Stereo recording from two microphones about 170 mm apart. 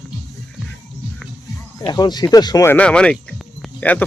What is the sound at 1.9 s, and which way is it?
Speech, 25° left (ahead or behind).